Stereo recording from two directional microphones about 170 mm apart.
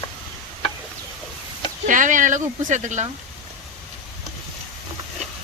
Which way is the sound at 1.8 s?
50° right (ahead or behind).